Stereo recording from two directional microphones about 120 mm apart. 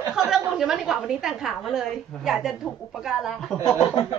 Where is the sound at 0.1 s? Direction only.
5° right (ahead or behind).